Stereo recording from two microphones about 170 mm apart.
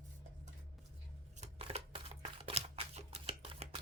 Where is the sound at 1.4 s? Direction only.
35° right (ahead or behind).